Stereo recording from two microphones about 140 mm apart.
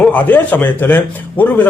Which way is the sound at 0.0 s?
10° left (ahead or behind).